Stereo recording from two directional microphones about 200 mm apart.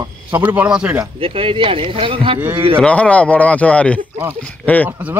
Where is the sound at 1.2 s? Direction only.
25° right (ahead or behind).